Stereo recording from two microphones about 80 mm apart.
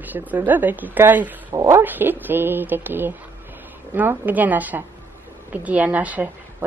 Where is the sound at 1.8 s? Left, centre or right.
Right.